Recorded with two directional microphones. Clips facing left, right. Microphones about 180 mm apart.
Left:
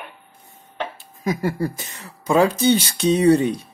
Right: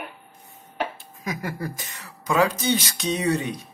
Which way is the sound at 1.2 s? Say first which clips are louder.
Left 8 dB; 30° left (ahead or behind).